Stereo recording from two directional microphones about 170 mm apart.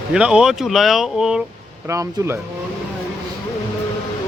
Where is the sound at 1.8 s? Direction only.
20° right (ahead or behind).